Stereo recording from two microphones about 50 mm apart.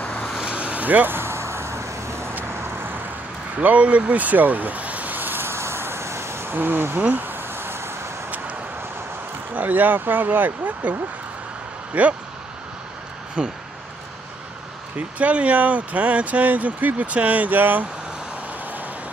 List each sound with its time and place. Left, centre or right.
0.0 s vehicle: left
0.4 s vehicle: right
2.5 s vehicle: right
3.5 s vehicle: right
6.5 s speech: right
7.0 s a sound: right
9.6 s speech: right
11.9 s speech: right
13.4 s speech: right
15.0 s speech: right